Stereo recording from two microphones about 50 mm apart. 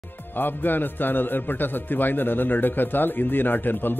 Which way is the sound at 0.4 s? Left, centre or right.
Left.